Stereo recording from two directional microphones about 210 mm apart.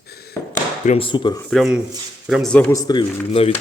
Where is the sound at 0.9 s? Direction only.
25° left (ahead or behind).